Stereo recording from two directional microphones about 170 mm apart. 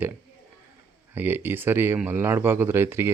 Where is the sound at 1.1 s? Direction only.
10° right (ahead or behind).